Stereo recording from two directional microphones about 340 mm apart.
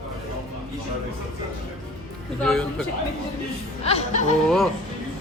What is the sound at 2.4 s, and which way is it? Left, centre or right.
Speech, centre.